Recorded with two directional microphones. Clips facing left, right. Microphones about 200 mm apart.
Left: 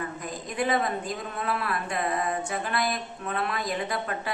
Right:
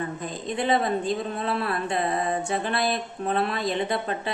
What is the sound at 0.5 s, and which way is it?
Speech, 25° right (ahead or behind).